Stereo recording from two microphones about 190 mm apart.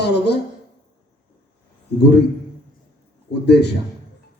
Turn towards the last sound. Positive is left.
turn(degrees=60)  # may be behind; listen again after turning